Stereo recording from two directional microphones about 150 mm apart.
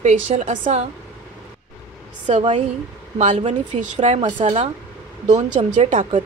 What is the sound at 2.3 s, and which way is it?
A woman's voice, 45° right (ahead or behind).